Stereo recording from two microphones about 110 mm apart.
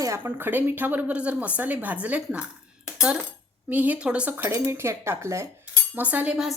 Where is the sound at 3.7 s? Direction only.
15° right (ahead or behind).